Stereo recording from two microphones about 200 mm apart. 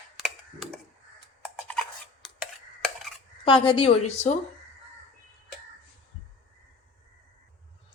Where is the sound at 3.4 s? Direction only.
25° left (ahead or behind).